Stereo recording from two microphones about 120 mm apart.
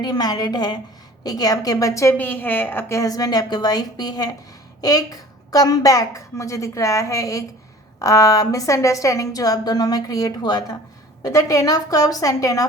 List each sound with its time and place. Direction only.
0.0 s a woman's voice: 35° left (ahead or behind)
2.1 s a woman's voice: 15° left (ahead or behind)